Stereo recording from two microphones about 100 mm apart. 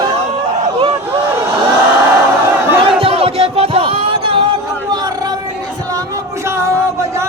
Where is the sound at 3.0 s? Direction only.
80° right; by 4.5 s 60° right (ahead or behind).